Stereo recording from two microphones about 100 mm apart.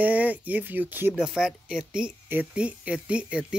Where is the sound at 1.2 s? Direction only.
5° right (ahead or behind).